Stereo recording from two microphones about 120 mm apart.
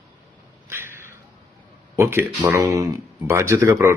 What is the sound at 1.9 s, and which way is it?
Speech, 20° right (ahead or behind).